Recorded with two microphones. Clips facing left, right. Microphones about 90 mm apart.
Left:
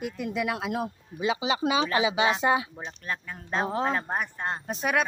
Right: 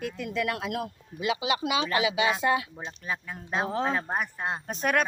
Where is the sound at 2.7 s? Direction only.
5° right (ahead or behind).